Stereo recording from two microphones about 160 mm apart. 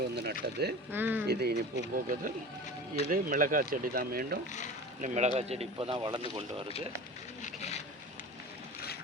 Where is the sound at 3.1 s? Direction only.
60° right (ahead or behind).